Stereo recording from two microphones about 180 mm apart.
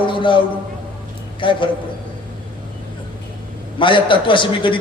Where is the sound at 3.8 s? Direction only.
25° left (ahead or behind).